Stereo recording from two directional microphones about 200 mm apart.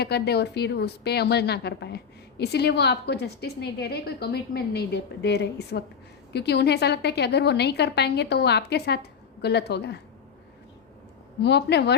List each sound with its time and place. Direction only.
0.0 s a woman's voice: 55° left (ahead or behind)
11.4 s a woman's voice: 55° left (ahead or behind)